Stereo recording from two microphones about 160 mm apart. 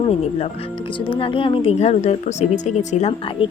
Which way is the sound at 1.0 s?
30° left (ahead or behind).